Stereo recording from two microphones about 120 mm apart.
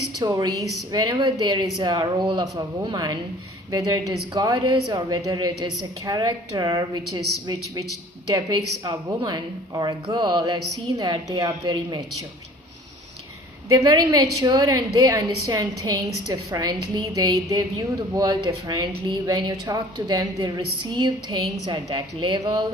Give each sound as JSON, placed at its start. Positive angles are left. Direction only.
{"t": 0.2, "sound": "speech", "side_deg": -30}
{"t": 13.7, "sound": "speech", "side_deg": -30}